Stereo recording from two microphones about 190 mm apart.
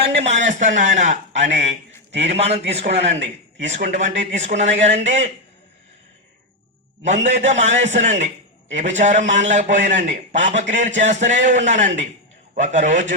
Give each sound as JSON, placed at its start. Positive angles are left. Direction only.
{"t": 0.0, "sound": "a man's voice", "side_deg": -35}
{"t": 1.3, "sound": "speech", "side_deg": -70}
{"t": 2.2, "sound": "a man's voice", "side_deg": -35}
{"t": 7.0, "sound": "a man's voice", "side_deg": -40}